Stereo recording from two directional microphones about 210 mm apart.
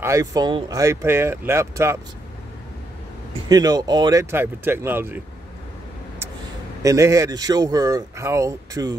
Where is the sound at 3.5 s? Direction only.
20° right (ahead or behind).